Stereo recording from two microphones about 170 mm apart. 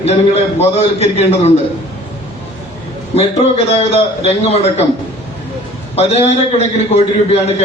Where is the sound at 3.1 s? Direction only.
40° left (ahead or behind).